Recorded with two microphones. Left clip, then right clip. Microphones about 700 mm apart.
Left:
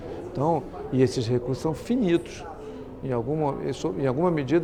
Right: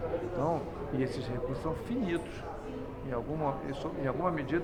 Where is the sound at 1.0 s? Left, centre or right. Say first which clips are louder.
Left 12 dB; left.